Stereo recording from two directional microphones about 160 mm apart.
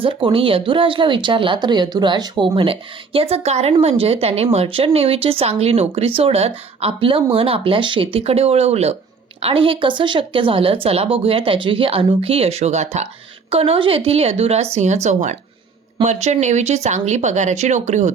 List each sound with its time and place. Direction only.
0.0 s speech: 35° right (ahead or behind)